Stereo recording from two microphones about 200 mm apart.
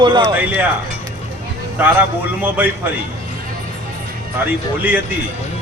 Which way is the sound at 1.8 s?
10° right (ahead or behind).